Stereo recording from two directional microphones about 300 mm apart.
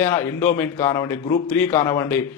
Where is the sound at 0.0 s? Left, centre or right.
Centre.